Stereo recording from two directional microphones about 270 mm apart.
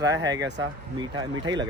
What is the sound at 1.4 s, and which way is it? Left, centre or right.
Speech, centre.